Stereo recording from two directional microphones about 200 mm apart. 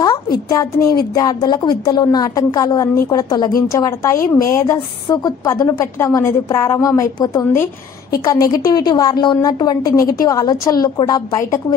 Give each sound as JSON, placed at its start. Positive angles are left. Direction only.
{"t": 0.5, "sound": "a woman's voice", "side_deg": 15}